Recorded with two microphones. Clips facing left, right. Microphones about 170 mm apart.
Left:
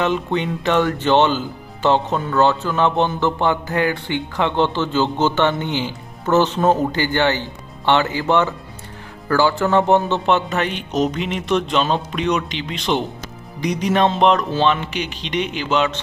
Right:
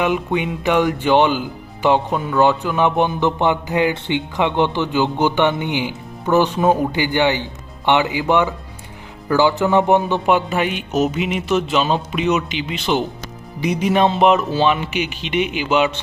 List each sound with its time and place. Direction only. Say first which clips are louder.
0.0 s speech: right 1 dB; 10° right (ahead or behind)